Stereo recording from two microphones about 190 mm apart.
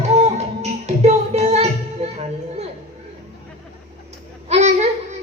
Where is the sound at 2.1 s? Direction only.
35° right (ahead or behind).